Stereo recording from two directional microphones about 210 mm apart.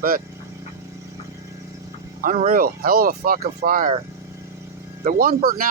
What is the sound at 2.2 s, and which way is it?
Speech, 35° right (ahead or behind).